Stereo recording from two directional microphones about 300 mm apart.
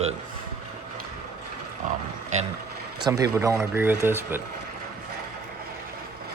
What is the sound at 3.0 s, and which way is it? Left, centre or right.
Speech, centre.